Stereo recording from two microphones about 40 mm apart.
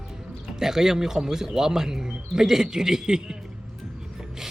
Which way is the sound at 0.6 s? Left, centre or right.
Centre.